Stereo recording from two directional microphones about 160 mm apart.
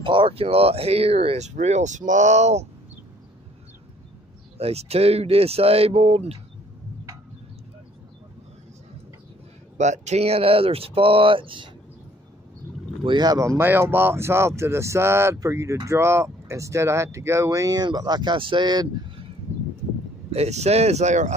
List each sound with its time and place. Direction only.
0.0 s speech: 30° right (ahead or behind)
4.6 s speech: 40° right (ahead or behind)
9.8 s speech: 45° right (ahead or behind)
13.0 s speech: 30° right (ahead or behind)
13.6 s speech: 15° right (ahead or behind)
20.2 s speech: 40° right (ahead or behind)